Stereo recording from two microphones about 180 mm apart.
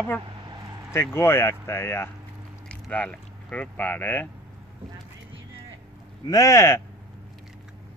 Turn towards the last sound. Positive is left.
turn(degrees=15)  # may be behind; listen again after turning